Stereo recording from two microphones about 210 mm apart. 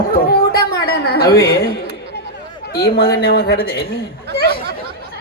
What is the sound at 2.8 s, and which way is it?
Speech, 45° left (ahead or behind).